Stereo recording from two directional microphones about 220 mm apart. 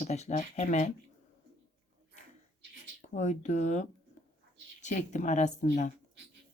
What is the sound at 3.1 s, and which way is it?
Speech, 30° left (ahead or behind).